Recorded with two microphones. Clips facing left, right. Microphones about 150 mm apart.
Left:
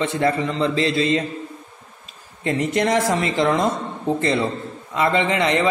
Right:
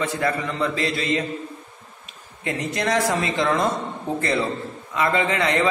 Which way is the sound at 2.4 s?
25° left (ahead or behind).